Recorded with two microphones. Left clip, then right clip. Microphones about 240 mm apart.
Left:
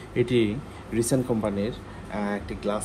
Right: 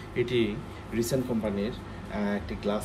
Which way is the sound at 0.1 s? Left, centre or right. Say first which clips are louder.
Left 4 dB; centre.